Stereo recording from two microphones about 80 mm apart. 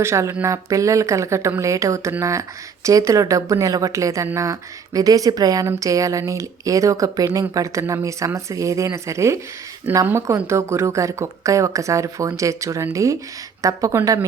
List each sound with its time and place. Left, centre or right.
0.0 s speech: right